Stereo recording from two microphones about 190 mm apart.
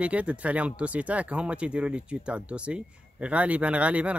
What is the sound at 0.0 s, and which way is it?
Speech, 5° right (ahead or behind).